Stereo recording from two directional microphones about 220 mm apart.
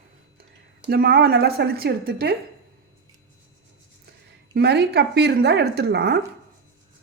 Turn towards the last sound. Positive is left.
turn(degrees=-45)  # may be behind; listen again after turning